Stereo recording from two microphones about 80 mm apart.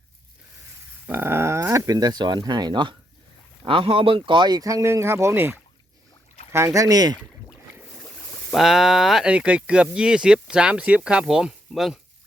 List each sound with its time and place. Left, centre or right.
1.0 s dog: right
1.9 s speech: right
3.7 s speech: right
6.7 s speech: right
8.5 s speech: centre